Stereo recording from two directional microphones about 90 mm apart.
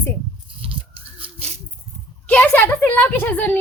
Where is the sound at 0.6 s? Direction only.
90° right.